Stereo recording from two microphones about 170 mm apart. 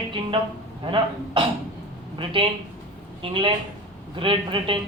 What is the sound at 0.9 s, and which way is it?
A woman's voice, 30° right (ahead or behind).